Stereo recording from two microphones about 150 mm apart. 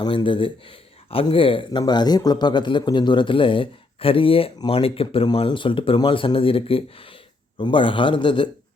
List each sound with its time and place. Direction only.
0.0 s speech: 35° left (ahead or behind)
4.5 s speech: 25° left (ahead or behind)
4.8 s speech: 40° left (ahead or behind)